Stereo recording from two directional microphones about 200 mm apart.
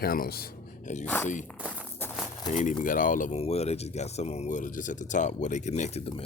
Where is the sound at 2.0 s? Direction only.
10° left (ahead or behind).